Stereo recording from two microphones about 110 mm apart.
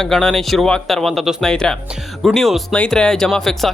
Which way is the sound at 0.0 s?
5° left (ahead or behind).